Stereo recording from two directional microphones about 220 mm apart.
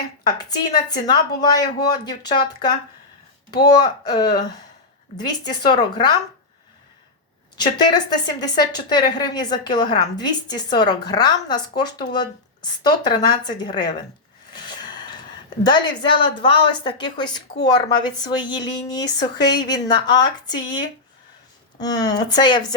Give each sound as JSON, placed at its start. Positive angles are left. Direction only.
{"t": 0.9, "sound": "a woman's voice", "side_deg": 20}
{"t": 7.5, "sound": "a woman's voice", "side_deg": 20}
{"t": 14.5, "sound": "a sound", "side_deg": 20}
{"t": 15.6, "sound": "a woman's voice", "side_deg": 20}